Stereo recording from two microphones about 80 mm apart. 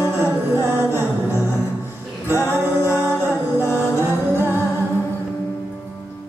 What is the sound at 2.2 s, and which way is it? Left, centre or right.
Music, right.